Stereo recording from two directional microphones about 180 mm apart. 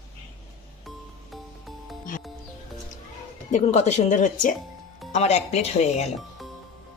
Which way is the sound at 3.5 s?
40° left (ahead or behind).